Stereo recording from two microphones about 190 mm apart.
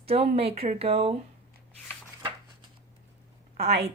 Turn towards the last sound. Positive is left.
turn(degrees=-35)  # may be behind; listen again after turning